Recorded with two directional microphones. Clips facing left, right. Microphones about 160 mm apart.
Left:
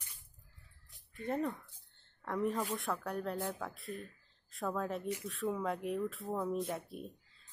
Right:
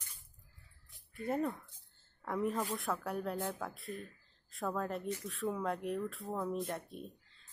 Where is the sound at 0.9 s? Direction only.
5° right (ahead or behind).